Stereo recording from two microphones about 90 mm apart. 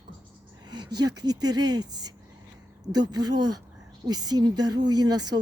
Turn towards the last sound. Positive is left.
turn(degrees=-50)  # may be behind; listen again after turning